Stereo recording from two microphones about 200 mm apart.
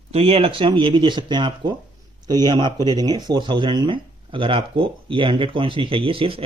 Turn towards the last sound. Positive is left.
turn(degrees=-25)  # may be behind; listen again after turning